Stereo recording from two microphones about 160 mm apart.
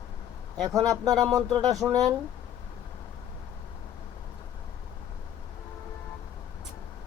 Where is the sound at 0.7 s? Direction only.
20° right (ahead or behind).